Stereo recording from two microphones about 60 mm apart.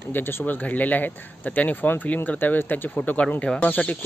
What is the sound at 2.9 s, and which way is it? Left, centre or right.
Speech, left.